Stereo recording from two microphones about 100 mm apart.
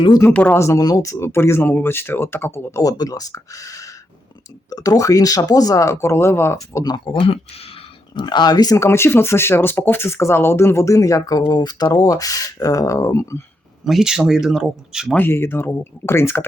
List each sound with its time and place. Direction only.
0.2 s speech: 20° left (ahead or behind)
0.6 s speech: 35° left (ahead or behind)
2.8 s speech: 40° left (ahead or behind)
6.8 s speech: 50° left (ahead or behind); by 8.2 s 70° left (ahead or behind)
8.2 s speech: 45° left (ahead or behind); by 13.4 s 30° left (ahead or behind)
13.8 s speech: 5° right (ahead or behind)
15.1 s speech: 20° left (ahead or behind)